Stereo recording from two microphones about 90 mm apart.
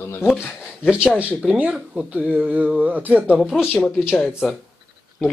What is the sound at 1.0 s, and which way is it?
Speech, 15° right (ahead or behind).